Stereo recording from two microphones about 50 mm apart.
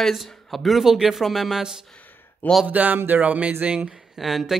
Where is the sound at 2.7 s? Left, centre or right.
Right.